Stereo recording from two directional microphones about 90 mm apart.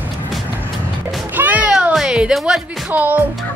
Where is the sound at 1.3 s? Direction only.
20° right (ahead or behind).